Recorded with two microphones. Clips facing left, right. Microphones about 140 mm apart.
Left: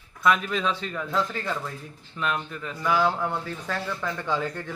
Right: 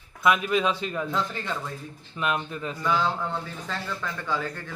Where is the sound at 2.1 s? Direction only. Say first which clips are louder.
Right 1 dB; 15° right (ahead or behind).